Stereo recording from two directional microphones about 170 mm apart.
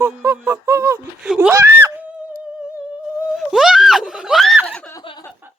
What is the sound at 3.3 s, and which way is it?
Screaming, centre (ahead or behind).